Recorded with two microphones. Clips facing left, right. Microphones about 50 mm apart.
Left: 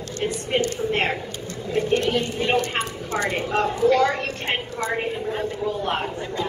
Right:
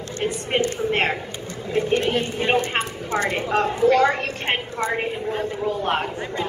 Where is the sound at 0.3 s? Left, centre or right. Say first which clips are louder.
Right 1 dB; right.